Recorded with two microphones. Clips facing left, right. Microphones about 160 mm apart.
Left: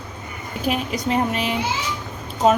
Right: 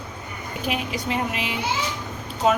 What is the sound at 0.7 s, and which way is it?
Speech, 40° left (ahead or behind).